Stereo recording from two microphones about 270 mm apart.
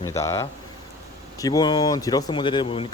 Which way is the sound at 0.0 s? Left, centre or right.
Centre.